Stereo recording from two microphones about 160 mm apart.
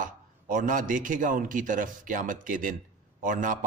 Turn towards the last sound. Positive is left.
turn(degrees=-55)  # may be behind; listen again after turning